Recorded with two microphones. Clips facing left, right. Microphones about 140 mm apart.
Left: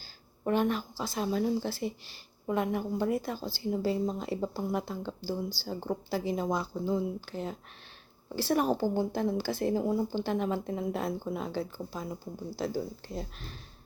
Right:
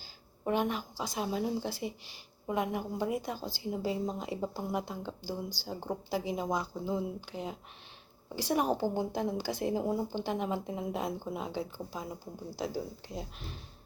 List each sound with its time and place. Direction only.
0.4 s speech: 10° right (ahead or behind)